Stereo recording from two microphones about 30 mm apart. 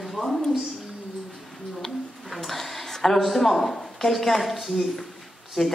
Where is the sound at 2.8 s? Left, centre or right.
Centre.